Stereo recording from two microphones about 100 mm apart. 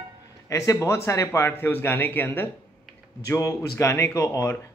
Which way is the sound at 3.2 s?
30° left (ahead or behind).